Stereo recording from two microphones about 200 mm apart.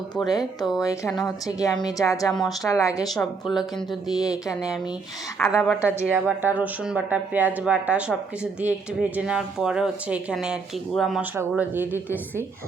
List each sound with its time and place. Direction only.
0.3 s a woman's voice: 20° left (ahead or behind)
3.2 s a woman's voice: centre (ahead or behind)
4.2 s a woman's voice: 15° left (ahead or behind)
5.4 s a woman's voice: centre (ahead or behind)